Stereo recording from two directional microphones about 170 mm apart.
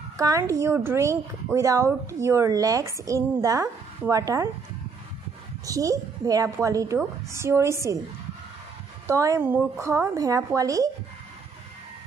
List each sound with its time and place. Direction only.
0.2 s speech: 20° right (ahead or behind)
5.7 s a woman's voice: 20° right (ahead or behind)
9.0 s a woman's voice: 20° right (ahead or behind)